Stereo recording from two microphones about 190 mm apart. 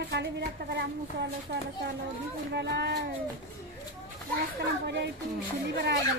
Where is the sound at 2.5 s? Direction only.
60° right (ahead or behind).